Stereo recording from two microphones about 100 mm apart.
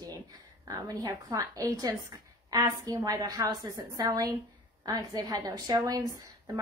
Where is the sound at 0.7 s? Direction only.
40° right (ahead or behind).